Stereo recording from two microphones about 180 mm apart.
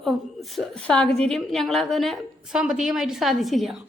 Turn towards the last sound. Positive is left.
turn(degrees=0)  # may be behind; listen again after turning